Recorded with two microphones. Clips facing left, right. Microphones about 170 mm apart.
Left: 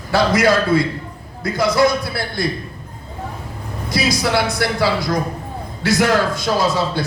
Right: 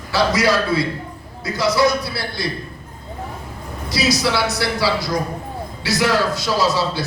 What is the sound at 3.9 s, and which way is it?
A man's voice, 50° left (ahead or behind).